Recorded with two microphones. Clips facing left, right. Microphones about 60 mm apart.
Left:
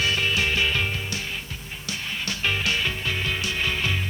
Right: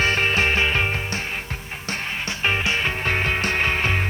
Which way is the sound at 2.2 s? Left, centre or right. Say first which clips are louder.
Right 3 dB; right.